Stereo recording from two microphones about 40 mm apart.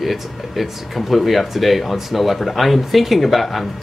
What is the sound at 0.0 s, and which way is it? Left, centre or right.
Speech, centre.